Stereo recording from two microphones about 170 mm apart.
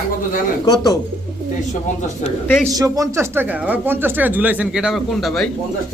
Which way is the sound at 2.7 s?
20° right (ahead or behind).